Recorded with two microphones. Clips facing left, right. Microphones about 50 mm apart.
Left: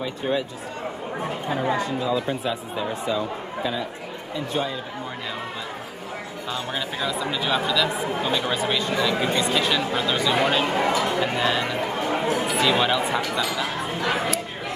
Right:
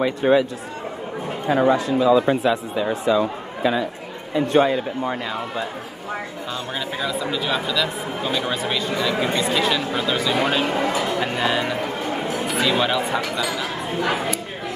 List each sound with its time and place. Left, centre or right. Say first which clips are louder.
0.0 s speech: right 8 dB; right
1.5 s speech: right 8 dB; right
4.5 s a man's voice: right 10 dB; right
6.5 s speech: even; centre